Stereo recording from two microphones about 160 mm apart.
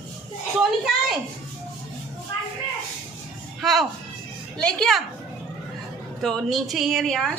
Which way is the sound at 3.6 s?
Centre (ahead or behind).